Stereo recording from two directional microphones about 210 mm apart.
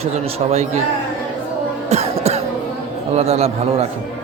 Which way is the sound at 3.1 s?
30° right (ahead or behind).